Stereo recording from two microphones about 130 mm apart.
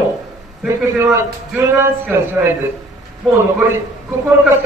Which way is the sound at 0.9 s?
20° right (ahead or behind).